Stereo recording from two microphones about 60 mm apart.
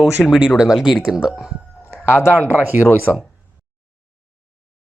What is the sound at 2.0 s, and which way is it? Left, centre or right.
Speech, left.